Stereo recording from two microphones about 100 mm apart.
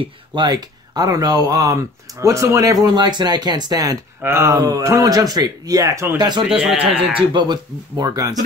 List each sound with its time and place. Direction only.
0.0 s speech: 50° right (ahead or behind)
4.2 s speech: 25° right (ahead or behind); by 6.4 s 45° right (ahead or behind)
6.5 s speech: 10° right (ahead or behind)
7.2 s speech: 50° right (ahead or behind)